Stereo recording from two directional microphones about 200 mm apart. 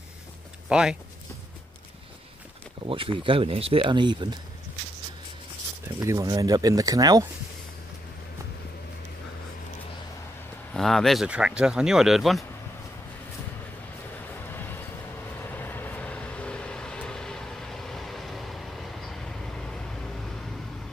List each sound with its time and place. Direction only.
0.7 s speech: centre (ahead or behind)
2.9 s speech: 25° right (ahead or behind)
5.9 s speech: 15° right (ahead or behind)
10.7 s speech: centre (ahead or behind)
14.5 s a sound: 10° left (ahead or behind)
15.5 s vehicle: 10° left (ahead or behind)